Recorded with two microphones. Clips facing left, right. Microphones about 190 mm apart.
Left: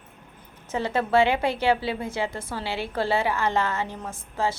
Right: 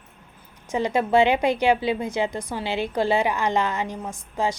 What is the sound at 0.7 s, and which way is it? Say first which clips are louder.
A woman's voice: right 3 dB; 15° right (ahead or behind).